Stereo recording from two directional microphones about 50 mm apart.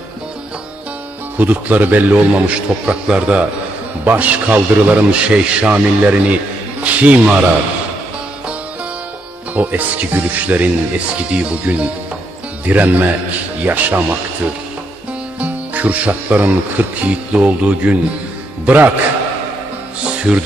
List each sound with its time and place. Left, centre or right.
1.4 s speech: right
4.0 s speech: right
9.5 s speech: right
15.3 s speech: right
17.1 s speech: right
20.3 s speech: centre